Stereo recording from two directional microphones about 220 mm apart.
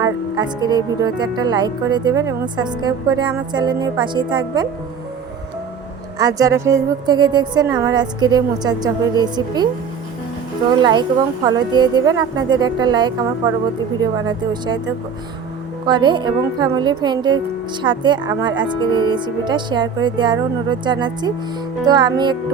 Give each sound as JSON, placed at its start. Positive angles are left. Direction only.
{"t": 0.0, "sound": "speech", "side_deg": -20}
{"t": 6.1, "sound": "a woman's voice", "side_deg": -15}
{"t": 11.4, "sound": "speech", "side_deg": -20}
{"t": 15.9, "sound": "speech", "side_deg": -20}